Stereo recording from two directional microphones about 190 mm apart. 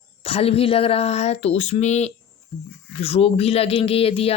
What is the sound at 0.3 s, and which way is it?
Speech, 30° left (ahead or behind).